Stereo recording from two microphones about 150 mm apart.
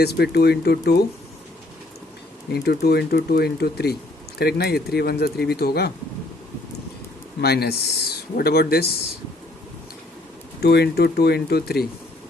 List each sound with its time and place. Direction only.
0.0 s speech: 90° left
2.5 s speech: 90° left
7.4 s speech: 90° left
10.6 s speech: 90° left